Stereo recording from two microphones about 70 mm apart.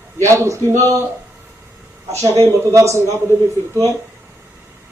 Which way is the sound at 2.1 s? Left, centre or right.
Right.